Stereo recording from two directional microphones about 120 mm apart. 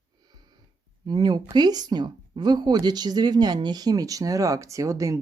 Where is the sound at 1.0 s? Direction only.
35° right (ahead or behind).